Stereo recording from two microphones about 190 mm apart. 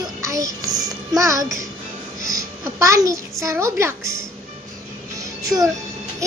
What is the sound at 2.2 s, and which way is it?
A child's voice, 15° right (ahead or behind).